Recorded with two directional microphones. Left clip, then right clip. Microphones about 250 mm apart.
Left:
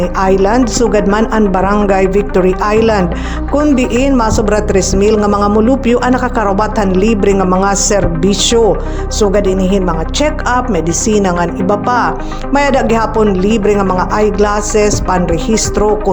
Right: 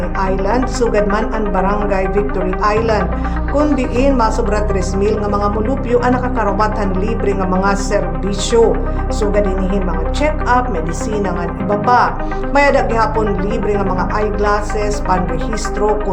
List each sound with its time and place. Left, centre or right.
0.2 s a woman's voice: left